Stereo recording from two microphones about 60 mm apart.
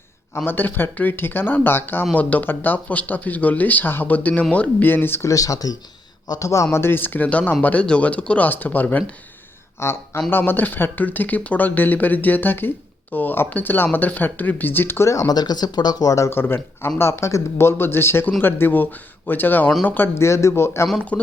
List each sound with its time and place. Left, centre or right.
0.3 s speech: left
4.9 s speech: left
5.2 s speech: left
6.7 s speech: left
9.8 s speech: left
10.2 s speech: left
15.0 s speech: left
16.0 s speech: left
16.3 s speech: left
17.0 s speech: left
20.1 s speech: left
21.1 s speech: left